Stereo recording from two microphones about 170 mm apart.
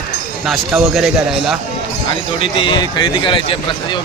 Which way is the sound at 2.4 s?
30° left (ahead or behind).